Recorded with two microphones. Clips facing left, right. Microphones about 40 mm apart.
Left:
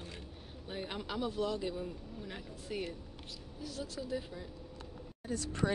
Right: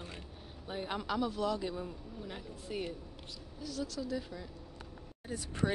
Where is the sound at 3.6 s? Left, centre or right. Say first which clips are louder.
Right 3 dB; left.